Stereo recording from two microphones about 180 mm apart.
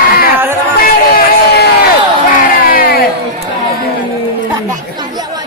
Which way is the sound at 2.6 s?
55° left (ahead or behind).